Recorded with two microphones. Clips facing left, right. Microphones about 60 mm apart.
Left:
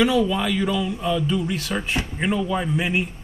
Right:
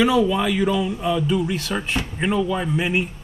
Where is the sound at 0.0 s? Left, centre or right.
Centre.